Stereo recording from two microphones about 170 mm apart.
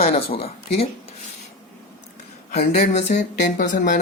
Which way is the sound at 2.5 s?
40° left (ahead or behind).